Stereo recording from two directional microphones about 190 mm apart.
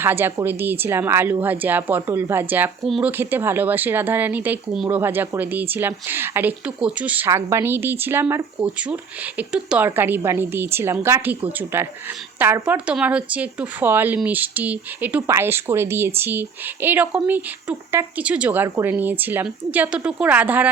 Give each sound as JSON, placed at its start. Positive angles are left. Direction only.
{"t": 0.0, "sound": "speech", "side_deg": -10}